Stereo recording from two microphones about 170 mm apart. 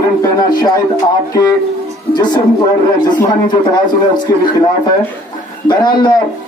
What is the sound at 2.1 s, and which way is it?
A man's voice, 25° left (ahead or behind).